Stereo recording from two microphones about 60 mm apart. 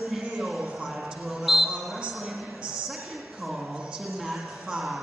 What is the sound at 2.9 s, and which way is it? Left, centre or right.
Speech, centre.